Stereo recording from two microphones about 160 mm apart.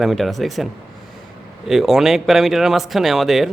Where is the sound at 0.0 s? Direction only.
Centre (ahead or behind).